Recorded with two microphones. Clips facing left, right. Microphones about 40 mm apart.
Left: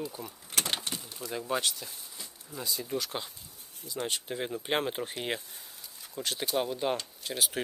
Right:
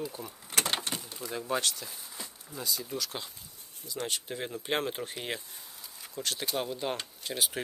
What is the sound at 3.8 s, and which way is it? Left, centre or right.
Speech, centre.